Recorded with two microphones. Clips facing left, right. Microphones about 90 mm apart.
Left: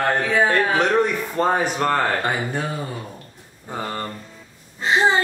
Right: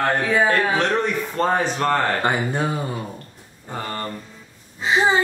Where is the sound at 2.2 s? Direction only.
25° right (ahead or behind).